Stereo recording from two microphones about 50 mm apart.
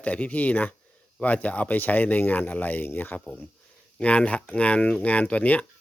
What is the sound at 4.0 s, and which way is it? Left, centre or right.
Speech, left.